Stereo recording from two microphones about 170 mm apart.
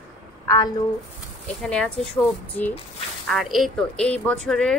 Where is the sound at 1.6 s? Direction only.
5° left (ahead or behind).